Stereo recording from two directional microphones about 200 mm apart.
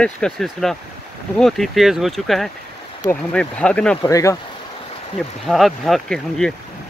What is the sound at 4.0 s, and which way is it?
Speech, 15° left (ahead or behind).